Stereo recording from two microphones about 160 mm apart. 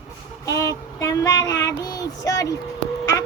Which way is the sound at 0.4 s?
20° left (ahead or behind).